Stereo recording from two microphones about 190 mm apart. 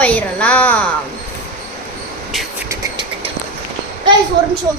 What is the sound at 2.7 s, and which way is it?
Vehicle, 15° right (ahead or behind).